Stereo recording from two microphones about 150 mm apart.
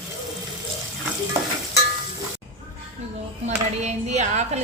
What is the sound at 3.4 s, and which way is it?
Speech, 50° right (ahead or behind).